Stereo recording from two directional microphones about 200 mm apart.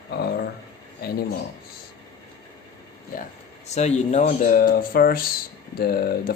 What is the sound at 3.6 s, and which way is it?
Speech, 35° left (ahead or behind).